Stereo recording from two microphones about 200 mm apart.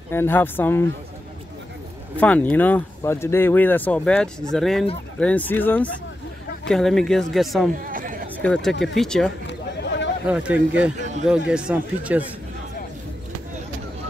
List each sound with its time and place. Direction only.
0.1 s speech: 10° left (ahead or behind)
2.1 s speech: 5° left (ahead or behind)
7.7 s a sound: 45° right (ahead or behind)
8.4 s speech: 5° left (ahead or behind)
9.5 s chatter: 65° left (ahead or behind)
10.2 s speech: 5° right (ahead or behind)
11.0 s a sound: 35° right (ahead or behind)
11.2 s speech: 5° right (ahead or behind)